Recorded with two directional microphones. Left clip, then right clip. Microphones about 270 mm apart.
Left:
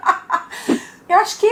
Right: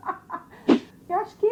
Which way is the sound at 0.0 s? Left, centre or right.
Centre.